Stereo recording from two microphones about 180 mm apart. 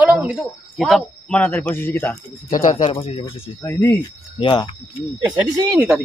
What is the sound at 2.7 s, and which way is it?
Speech, 35° left (ahead or behind).